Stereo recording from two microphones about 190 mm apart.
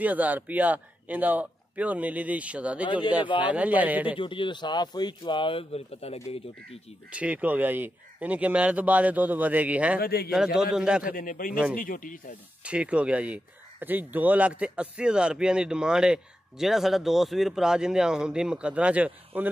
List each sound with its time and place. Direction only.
0.0 s a man's voice: 10° right (ahead or behind)
4.2 s speech: 25° left (ahead or behind)
7.2 s a man's voice: 5° right (ahead or behind)
9.9 s speech: 55° left (ahead or behind)
10.3 s speech: 5° right (ahead or behind)
11.1 s speech: 45° left (ahead or behind)
12.6 s speech: 5° right (ahead or behind)